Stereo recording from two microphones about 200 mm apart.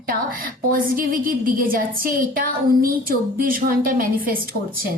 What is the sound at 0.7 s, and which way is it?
A woman's voice, 45° right (ahead or behind).